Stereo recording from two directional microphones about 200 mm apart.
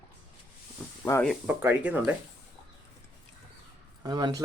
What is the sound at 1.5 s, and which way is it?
Speech, 10° right (ahead or behind).